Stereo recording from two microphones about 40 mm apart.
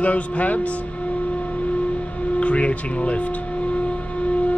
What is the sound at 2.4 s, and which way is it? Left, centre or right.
Speech, left.